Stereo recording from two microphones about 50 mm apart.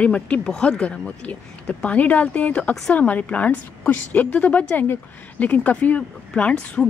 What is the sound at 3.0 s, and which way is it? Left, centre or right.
A woman's voice, left.